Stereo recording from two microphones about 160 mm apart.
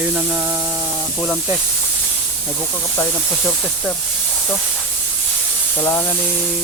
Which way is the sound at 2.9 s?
15° left (ahead or behind).